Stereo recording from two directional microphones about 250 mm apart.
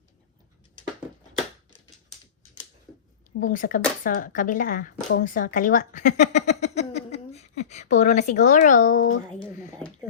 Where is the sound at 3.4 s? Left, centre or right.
Left.